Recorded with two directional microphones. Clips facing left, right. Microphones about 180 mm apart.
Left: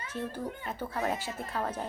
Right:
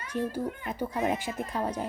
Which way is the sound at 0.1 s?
10° right (ahead or behind).